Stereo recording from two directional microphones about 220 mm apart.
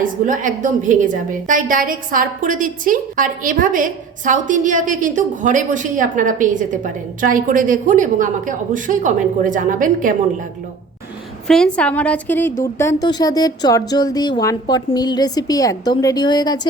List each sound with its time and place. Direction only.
0.0 s a woman's voice: 35° right (ahead or behind)
11.4 s a woman's voice: 5° left (ahead or behind); by 16.6 s 20° left (ahead or behind)